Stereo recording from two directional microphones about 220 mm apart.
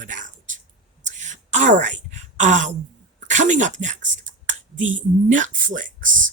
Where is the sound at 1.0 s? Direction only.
35° right (ahead or behind).